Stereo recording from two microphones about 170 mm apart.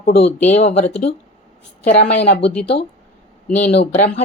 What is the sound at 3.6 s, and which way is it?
Speech, 75° left (ahead or behind).